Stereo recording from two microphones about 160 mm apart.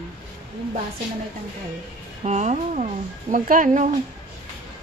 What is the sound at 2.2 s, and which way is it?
Speech, 45° right (ahead or behind).